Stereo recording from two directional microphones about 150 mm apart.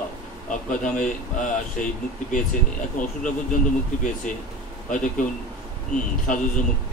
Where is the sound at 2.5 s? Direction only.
60° left (ahead or behind).